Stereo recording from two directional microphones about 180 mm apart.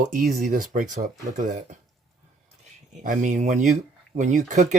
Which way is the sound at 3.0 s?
45° right (ahead or behind).